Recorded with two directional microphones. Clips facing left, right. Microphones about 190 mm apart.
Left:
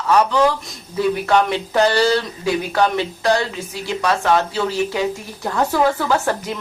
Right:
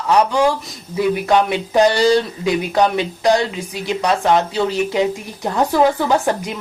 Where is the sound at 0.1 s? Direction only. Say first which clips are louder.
Right 1 dB; 15° right (ahead or behind).